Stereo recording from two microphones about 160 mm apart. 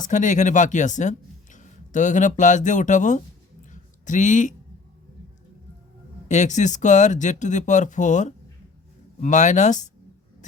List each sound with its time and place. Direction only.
0.0 s speech: 50° left (ahead or behind)
3.7 s a sound: 50° left (ahead or behind)
6.2 s speech: 50° left (ahead or behind)